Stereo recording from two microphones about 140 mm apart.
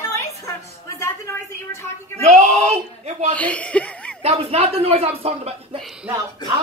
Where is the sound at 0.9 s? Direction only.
20° left (ahead or behind).